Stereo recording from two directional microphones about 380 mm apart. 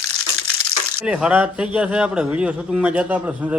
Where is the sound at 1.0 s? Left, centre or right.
Centre.